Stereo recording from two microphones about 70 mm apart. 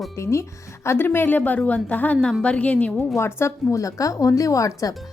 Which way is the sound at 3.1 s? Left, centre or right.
Left.